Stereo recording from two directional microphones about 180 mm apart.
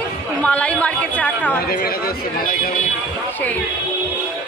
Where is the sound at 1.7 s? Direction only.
55° left (ahead or behind).